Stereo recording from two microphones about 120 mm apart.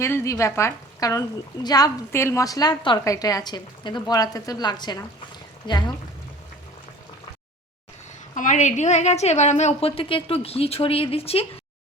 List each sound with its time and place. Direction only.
0.0 s a woman's voice: 20° left (ahead or behind); by 5.9 s 40° left (ahead or behind)
8.4 s a woman's voice: 90° left; by 9.9 s 70° left (ahead or behind)
9.9 s speech: 50° left (ahead or behind)